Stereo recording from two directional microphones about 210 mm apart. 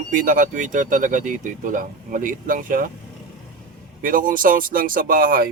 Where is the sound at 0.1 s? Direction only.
40° right (ahead or behind).